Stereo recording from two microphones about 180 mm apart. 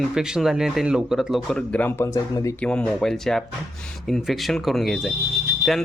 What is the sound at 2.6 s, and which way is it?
Speech, 5° left (ahead or behind).